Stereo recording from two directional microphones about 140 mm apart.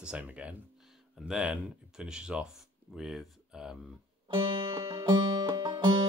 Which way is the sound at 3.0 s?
5° right (ahead or behind).